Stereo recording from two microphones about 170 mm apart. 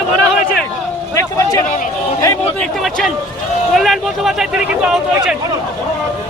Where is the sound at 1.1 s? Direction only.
20° left (ahead or behind).